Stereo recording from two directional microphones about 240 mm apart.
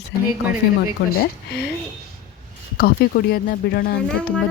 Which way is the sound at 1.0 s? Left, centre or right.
Left.